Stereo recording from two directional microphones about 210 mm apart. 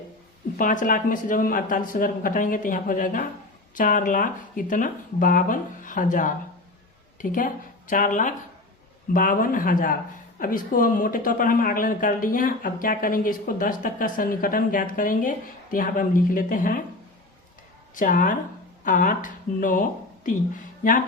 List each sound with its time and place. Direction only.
0.6 s speech: 40° left (ahead or behind)
17.9 s speech: 40° left (ahead or behind)